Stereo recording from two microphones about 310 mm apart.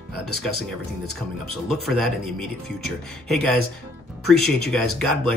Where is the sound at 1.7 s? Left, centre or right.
Centre.